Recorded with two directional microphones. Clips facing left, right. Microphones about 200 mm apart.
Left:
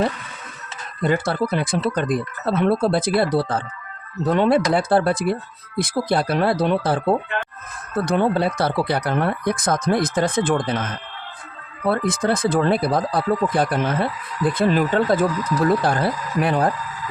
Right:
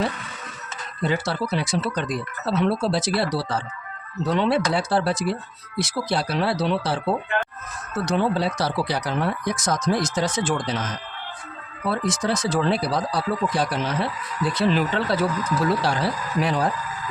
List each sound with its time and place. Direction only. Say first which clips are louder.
1.0 s speech: left 4 dB; 55° left (ahead or behind)